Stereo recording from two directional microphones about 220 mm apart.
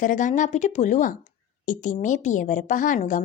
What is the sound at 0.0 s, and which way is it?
Speech, 35° left (ahead or behind).